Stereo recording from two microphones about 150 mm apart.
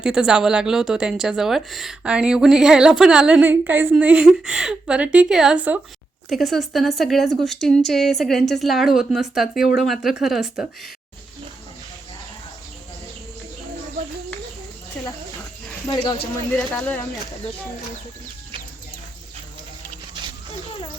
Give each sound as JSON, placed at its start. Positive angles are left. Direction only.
{"t": 0.0, "sound": "a woman's voice", "side_deg": -5}
{"t": 15.9, "sound": "speech", "side_deg": 30}
{"t": 16.5, "sound": "speech", "side_deg": 10}